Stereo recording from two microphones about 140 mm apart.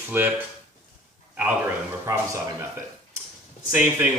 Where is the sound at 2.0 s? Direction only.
20° right (ahead or behind).